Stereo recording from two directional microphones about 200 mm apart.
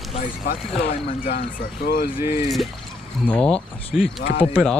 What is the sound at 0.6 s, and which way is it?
Speech, 30° left (ahead or behind).